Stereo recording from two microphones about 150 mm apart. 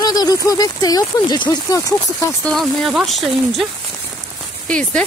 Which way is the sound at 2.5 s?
Centre (ahead or behind).